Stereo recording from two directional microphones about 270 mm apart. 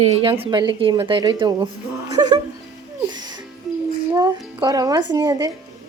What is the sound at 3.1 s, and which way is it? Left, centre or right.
Music, centre.